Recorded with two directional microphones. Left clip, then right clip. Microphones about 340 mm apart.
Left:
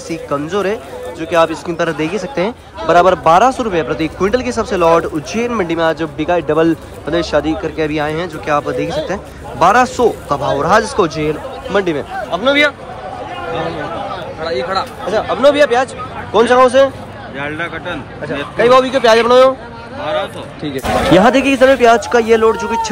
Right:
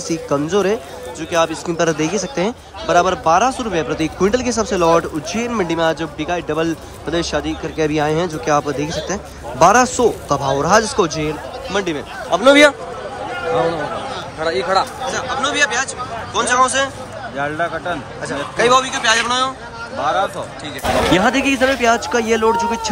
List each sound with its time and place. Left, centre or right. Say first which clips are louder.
0.1 s a man's voice: even; centre
12.3 s a man's voice: right 3 dB; centre
14.4 s speech: right 1 dB; right
15.0 s speech: left 8 dB; centre
18.2 s speech: left 4 dB; centre
20.6 s speech: left 3 dB; centre